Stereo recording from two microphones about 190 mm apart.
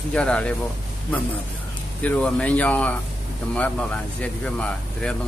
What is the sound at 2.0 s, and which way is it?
A man's voice, 5° left (ahead or behind).